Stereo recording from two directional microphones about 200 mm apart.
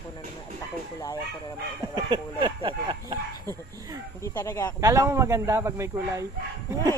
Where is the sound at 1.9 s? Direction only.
20° right (ahead or behind).